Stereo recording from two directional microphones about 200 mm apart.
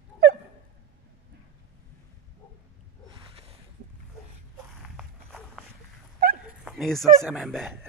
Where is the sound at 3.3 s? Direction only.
30° right (ahead or behind).